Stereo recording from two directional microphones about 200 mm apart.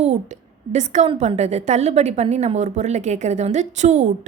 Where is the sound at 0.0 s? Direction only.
35° right (ahead or behind).